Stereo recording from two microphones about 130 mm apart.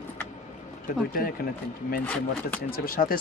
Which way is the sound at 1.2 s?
90° left.